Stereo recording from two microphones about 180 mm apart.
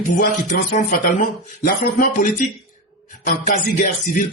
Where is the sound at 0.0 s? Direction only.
45° left (ahead or behind).